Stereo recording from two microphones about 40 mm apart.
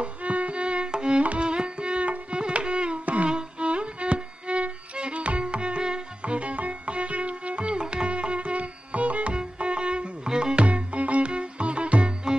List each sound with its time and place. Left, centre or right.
0.0 s violin: right
1.2 s music: right
3.3 s violin: right